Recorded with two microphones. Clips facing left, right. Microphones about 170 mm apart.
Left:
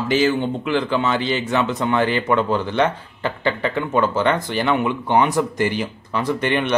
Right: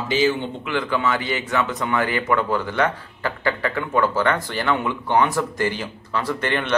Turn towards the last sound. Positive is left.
turn(degrees=15)  # may be behind; listen again after turning